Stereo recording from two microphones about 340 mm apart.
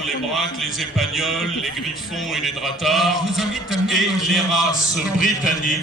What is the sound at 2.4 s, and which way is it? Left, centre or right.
Speech, centre.